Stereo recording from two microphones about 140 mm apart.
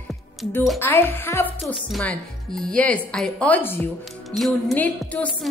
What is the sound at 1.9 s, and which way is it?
Speech, 5° left (ahead or behind).